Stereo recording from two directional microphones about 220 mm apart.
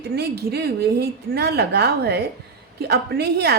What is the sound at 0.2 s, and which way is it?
A woman's voice, 45° right (ahead or behind).